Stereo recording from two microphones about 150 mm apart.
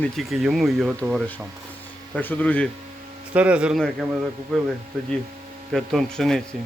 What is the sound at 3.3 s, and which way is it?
Speech, 10° right (ahead or behind).